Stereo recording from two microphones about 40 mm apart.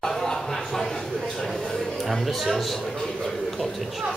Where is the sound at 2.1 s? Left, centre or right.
Centre.